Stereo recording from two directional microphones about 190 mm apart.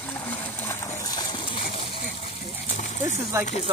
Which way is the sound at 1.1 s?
20° left (ahead or behind).